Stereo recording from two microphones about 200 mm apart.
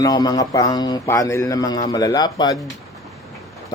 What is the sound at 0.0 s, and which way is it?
A man's voice, 20° left (ahead or behind).